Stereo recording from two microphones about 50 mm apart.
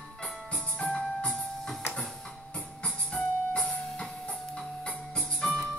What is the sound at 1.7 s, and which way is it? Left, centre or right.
Printer, centre.